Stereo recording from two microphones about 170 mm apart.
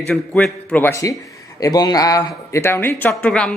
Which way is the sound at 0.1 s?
5° left (ahead or behind).